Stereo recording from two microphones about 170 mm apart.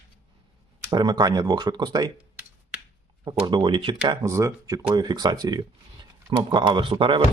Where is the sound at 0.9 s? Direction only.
25° right (ahead or behind).